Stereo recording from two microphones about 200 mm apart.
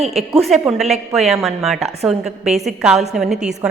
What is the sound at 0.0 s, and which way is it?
Speech, 30° right (ahead or behind).